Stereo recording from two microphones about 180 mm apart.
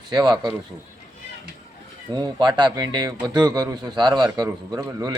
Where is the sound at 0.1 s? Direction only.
25° right (ahead or behind).